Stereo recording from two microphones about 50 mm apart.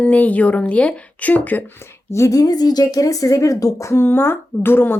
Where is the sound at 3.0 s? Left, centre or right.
Left.